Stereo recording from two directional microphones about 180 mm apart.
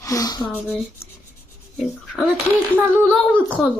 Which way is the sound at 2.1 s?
5° left (ahead or behind).